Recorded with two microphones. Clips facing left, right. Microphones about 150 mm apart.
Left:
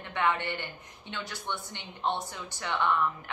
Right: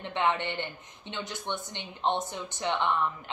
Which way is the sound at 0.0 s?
20° right (ahead or behind).